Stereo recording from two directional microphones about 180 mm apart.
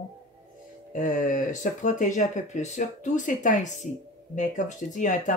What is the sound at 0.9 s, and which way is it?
Speech, 45° left (ahead or behind).